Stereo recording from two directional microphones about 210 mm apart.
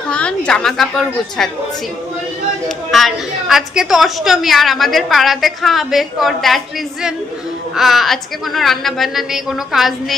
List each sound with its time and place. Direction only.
0.5 s a woman's voice: centre (ahead or behind)
2.9 s a woman's voice: centre (ahead or behind)